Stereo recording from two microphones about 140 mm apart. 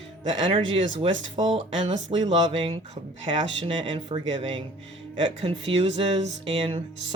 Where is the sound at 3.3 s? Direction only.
35° right (ahead or behind).